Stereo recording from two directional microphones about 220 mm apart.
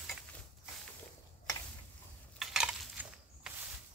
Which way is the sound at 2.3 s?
Centre (ahead or behind).